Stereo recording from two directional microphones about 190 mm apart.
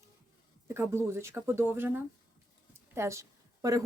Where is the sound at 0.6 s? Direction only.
15° right (ahead or behind).